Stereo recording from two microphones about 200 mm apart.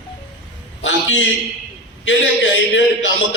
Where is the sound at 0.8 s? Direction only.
70° left (ahead or behind).